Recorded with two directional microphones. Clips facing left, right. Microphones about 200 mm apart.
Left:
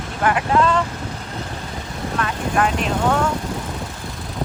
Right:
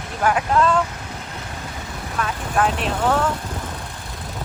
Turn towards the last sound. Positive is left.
turn(degrees=-5)  # may be behind; listen again after turning